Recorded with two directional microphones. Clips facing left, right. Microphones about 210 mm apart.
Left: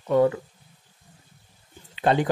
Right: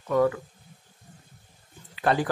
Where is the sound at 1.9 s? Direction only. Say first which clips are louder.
Left 3 dB; 20° left (ahead or behind).